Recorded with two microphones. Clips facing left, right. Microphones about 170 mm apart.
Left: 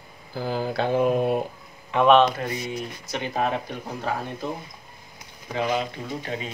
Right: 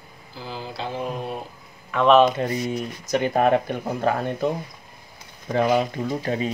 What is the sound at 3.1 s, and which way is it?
Speech, 55° right (ahead or behind).